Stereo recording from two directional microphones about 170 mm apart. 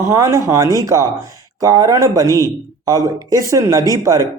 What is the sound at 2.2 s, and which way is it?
Speech, 20° left (ahead or behind).